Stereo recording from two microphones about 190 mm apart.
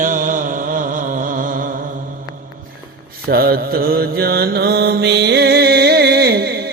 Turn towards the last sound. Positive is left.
turn(degrees=-60)  # may be behind; listen again after turning